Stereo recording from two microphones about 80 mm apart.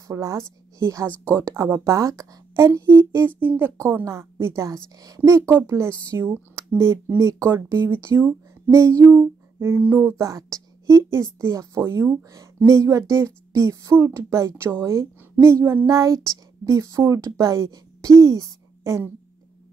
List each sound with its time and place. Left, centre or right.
0.1 s speech: right
3.7 s speech: right
5.2 s speech: right
6.1 s speech: right
10.1 s speech: right
15.9 s speech: right